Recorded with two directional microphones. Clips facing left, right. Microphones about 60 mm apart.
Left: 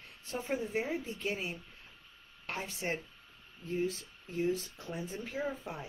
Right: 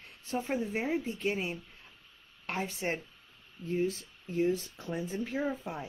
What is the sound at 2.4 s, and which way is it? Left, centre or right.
Speech, right.